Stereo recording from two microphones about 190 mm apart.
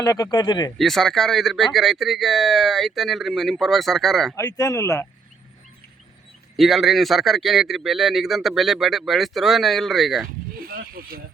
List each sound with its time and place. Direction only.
0.0 s speech: 20° left (ahead or behind)
0.8 s speech: centre (ahead or behind)
4.4 s speech: 20° left (ahead or behind)
6.6 s speech: centre (ahead or behind)
10.6 s speech: 50° right (ahead or behind)